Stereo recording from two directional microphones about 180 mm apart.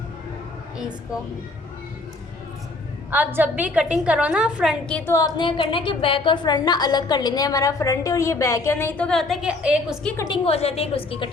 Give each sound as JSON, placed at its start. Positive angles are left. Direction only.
{"t": 3.1, "sound": "a woman's voice", "side_deg": -10}
{"t": 4.9, "sound": "a woman's voice", "side_deg": 10}
{"t": 10.2, "sound": "a woman's voice", "side_deg": 25}